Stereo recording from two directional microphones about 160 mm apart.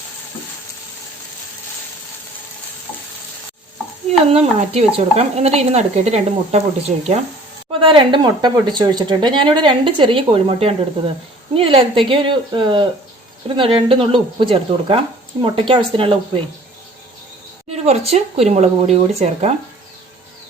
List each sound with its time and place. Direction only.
4.3 s speech: 40° right (ahead or behind)
17.8 s speech: 40° right (ahead or behind)